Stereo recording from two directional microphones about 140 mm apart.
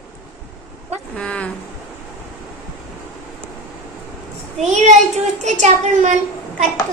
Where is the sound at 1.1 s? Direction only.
10° left (ahead or behind).